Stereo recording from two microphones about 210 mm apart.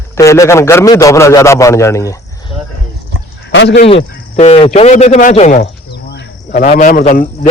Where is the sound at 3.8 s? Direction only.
30° left (ahead or behind).